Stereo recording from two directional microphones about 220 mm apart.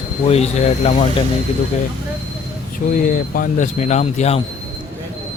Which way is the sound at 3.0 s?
40° left (ahead or behind).